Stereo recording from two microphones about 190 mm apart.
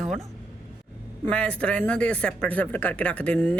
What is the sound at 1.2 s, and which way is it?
Speech, 5° left (ahead or behind).